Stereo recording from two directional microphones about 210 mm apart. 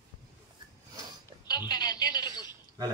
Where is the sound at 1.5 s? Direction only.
20° left (ahead or behind).